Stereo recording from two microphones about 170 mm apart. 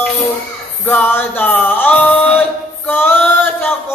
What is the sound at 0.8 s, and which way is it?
Music, 10° left (ahead or behind).